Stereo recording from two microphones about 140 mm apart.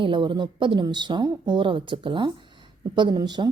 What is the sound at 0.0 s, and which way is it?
A woman's voice, 35° right (ahead or behind).